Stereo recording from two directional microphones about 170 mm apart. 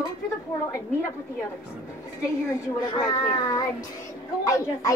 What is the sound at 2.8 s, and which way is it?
A child's voice, 25° left (ahead or behind).